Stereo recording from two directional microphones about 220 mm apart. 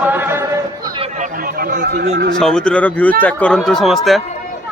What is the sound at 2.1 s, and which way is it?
Speech, 60° right (ahead or behind).